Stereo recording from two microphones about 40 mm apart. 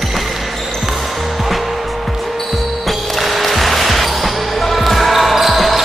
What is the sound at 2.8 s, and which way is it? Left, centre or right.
Basketball bounce, centre.